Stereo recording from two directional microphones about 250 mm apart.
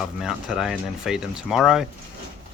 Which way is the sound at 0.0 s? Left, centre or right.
Centre.